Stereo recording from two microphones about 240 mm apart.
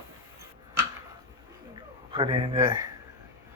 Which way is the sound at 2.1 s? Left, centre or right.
Right.